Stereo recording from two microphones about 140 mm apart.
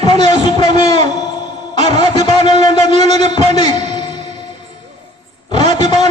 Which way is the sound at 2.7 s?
50° right (ahead or behind).